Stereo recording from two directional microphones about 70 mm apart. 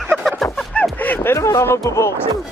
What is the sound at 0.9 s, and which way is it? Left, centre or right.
Speech, left.